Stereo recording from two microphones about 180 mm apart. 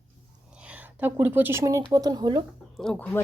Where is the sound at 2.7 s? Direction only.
5° left (ahead or behind).